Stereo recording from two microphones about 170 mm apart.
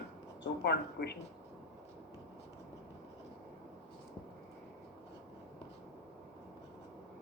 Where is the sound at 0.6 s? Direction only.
75° left (ahead or behind).